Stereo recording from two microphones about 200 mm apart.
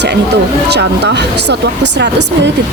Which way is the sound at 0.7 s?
60° right (ahead or behind).